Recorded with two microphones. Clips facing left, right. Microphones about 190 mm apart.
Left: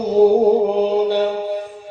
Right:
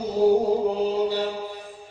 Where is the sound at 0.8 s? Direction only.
65° left (ahead or behind).